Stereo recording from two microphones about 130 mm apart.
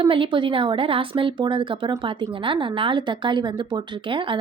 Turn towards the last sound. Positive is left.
turn(degrees=-40)  # may be behind; listen again after turning